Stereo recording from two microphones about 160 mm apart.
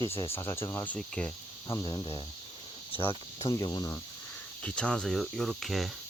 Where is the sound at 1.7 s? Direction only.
25° left (ahead or behind).